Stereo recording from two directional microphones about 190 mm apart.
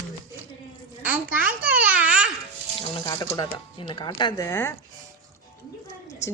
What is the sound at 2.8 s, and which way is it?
Speech, 25° left (ahead or behind).